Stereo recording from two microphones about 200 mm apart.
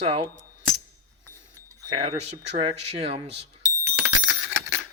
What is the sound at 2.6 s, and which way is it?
Speech, 30° right (ahead or behind).